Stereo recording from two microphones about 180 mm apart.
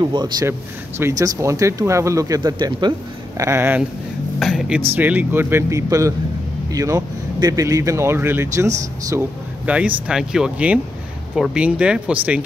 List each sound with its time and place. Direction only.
0.0 s speech: 25° right (ahead or behind)
4.4 s speech: centre (ahead or behind)